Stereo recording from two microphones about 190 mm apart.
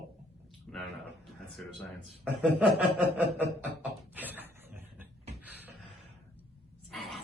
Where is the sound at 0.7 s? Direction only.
5° left (ahead or behind).